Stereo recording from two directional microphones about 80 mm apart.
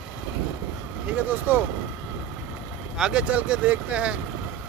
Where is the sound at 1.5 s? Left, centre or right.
Right.